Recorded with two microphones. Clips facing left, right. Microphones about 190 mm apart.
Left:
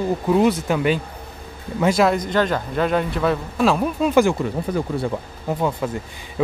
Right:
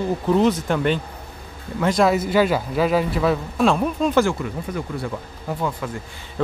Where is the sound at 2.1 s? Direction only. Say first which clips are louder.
Right 1 dB; 5° right (ahead or behind); by 4.4 s 15° left (ahead or behind).